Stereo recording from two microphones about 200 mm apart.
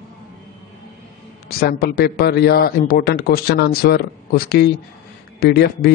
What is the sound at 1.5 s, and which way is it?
A man's voice, 50° left (ahead or behind).